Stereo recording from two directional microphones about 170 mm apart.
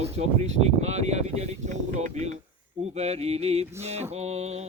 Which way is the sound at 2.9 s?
40° right (ahead or behind).